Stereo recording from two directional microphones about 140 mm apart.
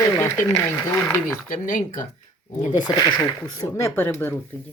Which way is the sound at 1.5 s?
70° left (ahead or behind).